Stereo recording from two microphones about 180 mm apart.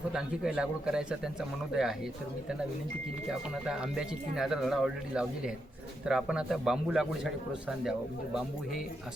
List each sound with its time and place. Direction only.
0.1 s speech: 5° right (ahead or behind)
3.5 s speech: 5° right (ahead or behind)